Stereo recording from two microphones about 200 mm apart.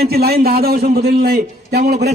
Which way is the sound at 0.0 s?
50° right (ahead or behind).